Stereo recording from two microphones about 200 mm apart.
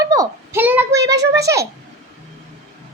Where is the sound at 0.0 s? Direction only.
15° right (ahead or behind).